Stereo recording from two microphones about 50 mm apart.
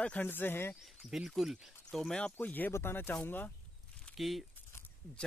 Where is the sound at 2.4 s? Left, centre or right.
Left.